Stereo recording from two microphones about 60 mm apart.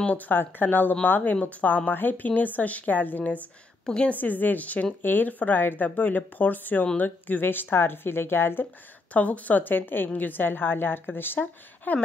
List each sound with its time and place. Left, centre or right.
0.0 s a woman's voice: left
3.8 s a woman's voice: centre
4.1 s a woman's voice: left
9.1 s a woman's voice: left